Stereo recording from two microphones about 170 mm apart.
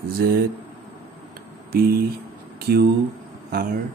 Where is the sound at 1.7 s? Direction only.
60° right (ahead or behind).